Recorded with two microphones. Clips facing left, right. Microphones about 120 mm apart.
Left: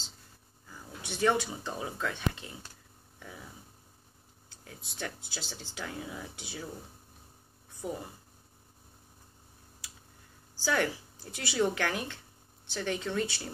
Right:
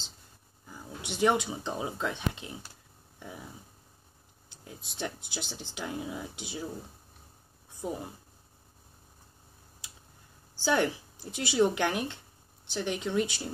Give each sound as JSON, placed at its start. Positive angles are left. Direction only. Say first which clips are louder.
{"t": 0.7, "sound": "speech", "louder": "right 2 dB", "side_deg": -15}
{"t": 4.6, "sound": "speech", "louder": "right 3 dB", "side_deg": -20}
{"t": 10.6, "sound": "speech", "louder": "right 3 dB", "side_deg": -20}